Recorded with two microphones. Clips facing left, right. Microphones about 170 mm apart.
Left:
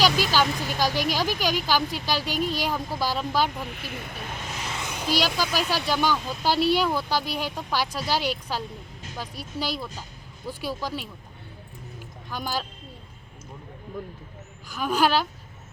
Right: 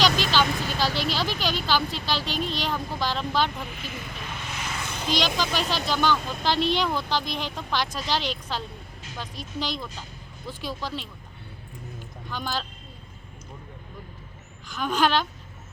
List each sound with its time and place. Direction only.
0.0 s vehicle: 10° left (ahead or behind)
0.8 s speech: 15° left (ahead or behind)
3.7 s speech: 60° left (ahead or behind)
4.2 s vehicle: 40° left (ahead or behind)
4.8 s speech: 15° left (ahead or behind)
11.9 s vehicle: 10° left (ahead or behind)
14.7 s speech: 10° left (ahead or behind)